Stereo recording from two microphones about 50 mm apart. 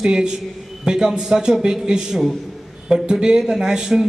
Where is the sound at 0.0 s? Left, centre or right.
Centre.